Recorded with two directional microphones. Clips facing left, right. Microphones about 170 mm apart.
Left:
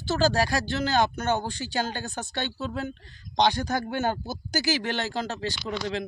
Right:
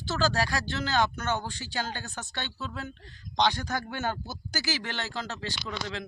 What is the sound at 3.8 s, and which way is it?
Speech, 45° left (ahead or behind).